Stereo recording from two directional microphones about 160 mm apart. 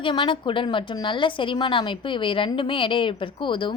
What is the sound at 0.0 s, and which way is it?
A woman's voice, 30° left (ahead or behind).